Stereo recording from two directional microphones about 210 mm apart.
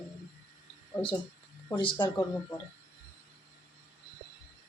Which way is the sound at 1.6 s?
20° left (ahead or behind).